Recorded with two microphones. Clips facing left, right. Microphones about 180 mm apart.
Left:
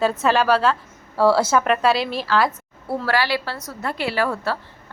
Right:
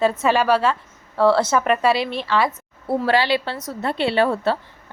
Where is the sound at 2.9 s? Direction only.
20° right (ahead or behind).